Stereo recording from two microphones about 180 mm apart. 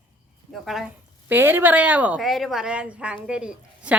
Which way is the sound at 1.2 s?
10° right (ahead or behind).